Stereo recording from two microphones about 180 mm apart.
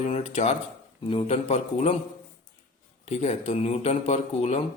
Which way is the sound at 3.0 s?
35° left (ahead or behind).